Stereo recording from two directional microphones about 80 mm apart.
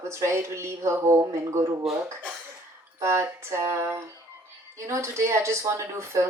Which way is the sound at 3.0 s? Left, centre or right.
Right.